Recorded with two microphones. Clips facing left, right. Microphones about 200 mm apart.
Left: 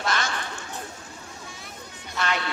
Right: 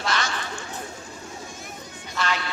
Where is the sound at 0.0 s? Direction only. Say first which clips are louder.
Even; 50° left (ahead or behind).